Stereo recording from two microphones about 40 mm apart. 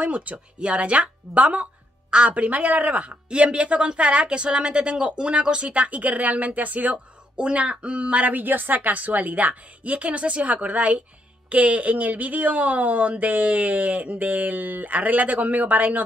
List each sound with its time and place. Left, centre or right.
0.0 s speech: right
3.3 s speech: right
7.3 s speech: right
8.3 s speech: right